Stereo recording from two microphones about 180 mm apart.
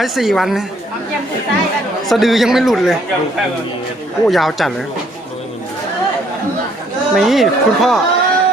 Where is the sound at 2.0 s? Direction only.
Centre (ahead or behind).